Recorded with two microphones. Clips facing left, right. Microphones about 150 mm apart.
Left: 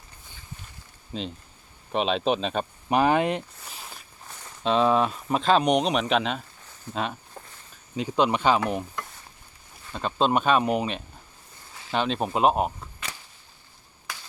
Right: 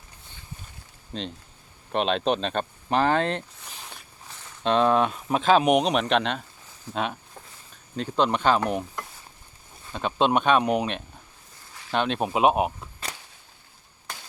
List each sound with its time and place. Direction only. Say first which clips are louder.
1.1 s speech: left 1 dB; 5° left (ahead or behind)
7.9 s speech: left 1 dB; 10° left (ahead or behind)
8.6 s stir: right 1 dB; 5° right (ahead or behind)
9.9 s speech: right 1 dB; centre (ahead or behind)